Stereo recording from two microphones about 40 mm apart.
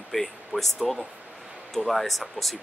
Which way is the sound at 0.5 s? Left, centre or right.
Right.